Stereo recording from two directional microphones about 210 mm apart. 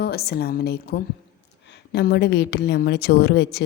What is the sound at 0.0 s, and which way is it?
A woman's voice, 50° left (ahead or behind).